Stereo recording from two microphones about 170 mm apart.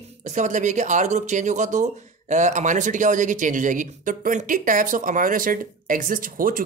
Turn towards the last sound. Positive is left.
turn(degrees=-55)  # may be behind; listen again after turning